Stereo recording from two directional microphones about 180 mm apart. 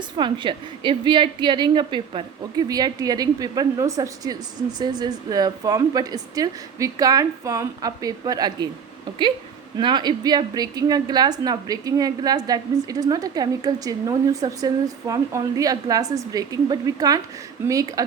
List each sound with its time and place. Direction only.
0.2 s a woman's voice: 25° right (ahead or behind)
9.7 s a woman's voice: 25° right (ahead or behind)